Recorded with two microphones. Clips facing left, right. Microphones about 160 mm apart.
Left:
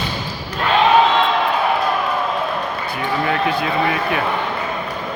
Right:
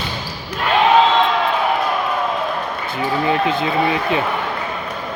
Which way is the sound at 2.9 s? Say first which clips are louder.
Right 3 dB; 20° right (ahead or behind).